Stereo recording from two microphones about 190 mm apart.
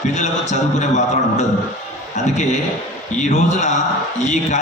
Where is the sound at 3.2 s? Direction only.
40° left (ahead or behind).